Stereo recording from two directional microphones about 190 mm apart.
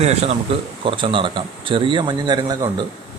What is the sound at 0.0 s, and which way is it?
A man's voice, 35° right (ahead or behind).